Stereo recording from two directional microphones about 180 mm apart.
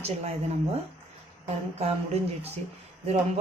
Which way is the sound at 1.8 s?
35° right (ahead or behind).